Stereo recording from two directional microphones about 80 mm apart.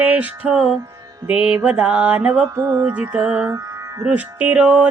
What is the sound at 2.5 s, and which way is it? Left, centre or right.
Music, right.